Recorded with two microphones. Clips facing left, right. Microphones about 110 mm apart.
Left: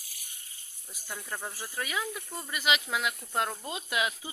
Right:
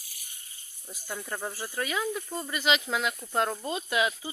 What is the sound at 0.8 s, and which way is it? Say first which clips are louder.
Speech: right 4 dB; 15° right (ahead or behind).